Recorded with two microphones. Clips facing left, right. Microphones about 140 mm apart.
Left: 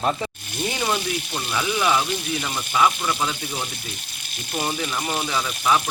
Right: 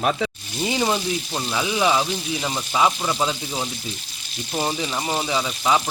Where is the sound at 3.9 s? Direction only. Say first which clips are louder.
Right 3 dB; 55° left (ahead or behind).